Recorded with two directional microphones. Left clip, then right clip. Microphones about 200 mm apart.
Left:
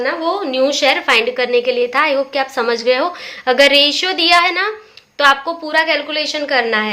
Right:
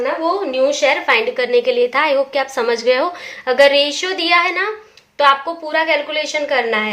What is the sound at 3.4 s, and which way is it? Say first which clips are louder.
A woman's voice: left 1 dB; 20° left (ahead or behind).